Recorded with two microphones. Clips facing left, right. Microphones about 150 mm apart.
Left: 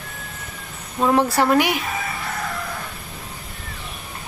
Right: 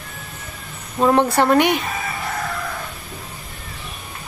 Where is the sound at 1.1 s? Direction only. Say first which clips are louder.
Right 2 dB; 5° left (ahead or behind).